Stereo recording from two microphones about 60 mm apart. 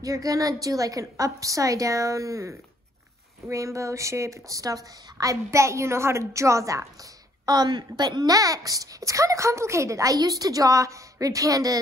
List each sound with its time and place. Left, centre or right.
0.0 s a child's voice: right
7.4 s a woman's voice: right
8.3 s a child's voice: right